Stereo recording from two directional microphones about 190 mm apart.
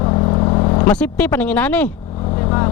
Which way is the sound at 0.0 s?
25° left (ahead or behind).